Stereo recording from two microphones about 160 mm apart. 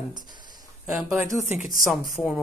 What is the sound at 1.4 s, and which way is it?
Speech, 45° left (ahead or behind).